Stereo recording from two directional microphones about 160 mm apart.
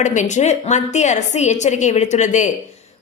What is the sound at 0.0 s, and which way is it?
A woman's voice, 50° left (ahead or behind).